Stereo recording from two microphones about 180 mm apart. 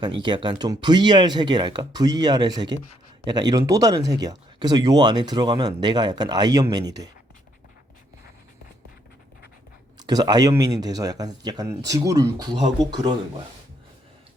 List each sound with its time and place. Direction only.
0.2 s speech: 25° right (ahead or behind)
10.0 s speech: 20° right (ahead or behind)